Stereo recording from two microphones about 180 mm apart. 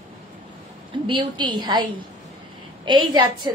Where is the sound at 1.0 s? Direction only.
25° right (ahead or behind).